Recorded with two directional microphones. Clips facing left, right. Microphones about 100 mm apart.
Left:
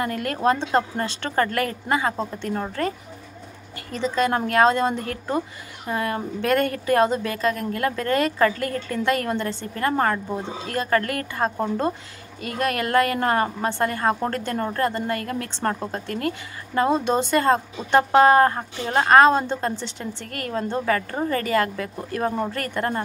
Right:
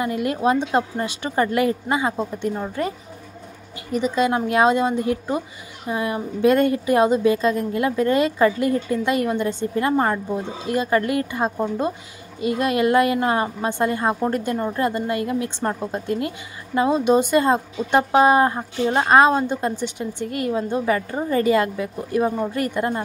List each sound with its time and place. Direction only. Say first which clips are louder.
0.0 s a woman's voice: right 2 dB; 15° right (ahead or behind)
3.9 s a woman's voice: right 2 dB; 15° right (ahead or behind)
19.0 s a woman's voice: left 1 dB; 15° right (ahead or behind)